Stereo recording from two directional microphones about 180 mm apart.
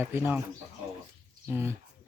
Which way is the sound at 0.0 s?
10° right (ahead or behind).